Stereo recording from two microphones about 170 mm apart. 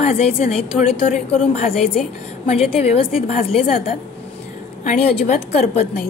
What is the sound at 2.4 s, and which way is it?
A woman's voice, 35° left (ahead or behind).